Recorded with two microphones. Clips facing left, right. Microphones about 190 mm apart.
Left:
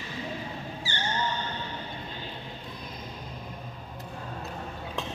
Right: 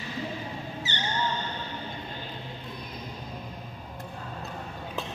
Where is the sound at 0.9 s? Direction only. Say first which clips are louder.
Even; 20° right (ahead or behind).